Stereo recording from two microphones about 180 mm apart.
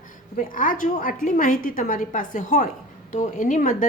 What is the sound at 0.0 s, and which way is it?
A woman's voice, 50° left (ahead or behind).